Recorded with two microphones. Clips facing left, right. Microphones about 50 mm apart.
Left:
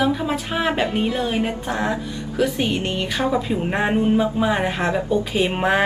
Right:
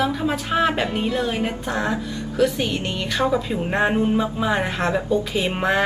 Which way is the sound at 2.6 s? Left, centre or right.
Left.